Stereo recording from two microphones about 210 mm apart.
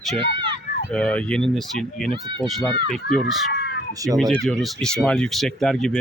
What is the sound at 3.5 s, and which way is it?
Cat, 50° left (ahead or behind).